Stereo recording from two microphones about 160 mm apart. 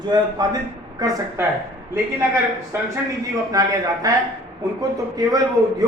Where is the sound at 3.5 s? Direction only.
20° right (ahead or behind).